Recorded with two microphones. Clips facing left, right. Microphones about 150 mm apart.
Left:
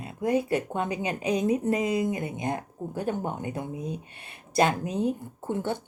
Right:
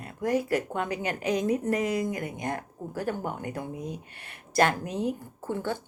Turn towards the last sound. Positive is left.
turn(degrees=20)  # may be behind; listen again after turning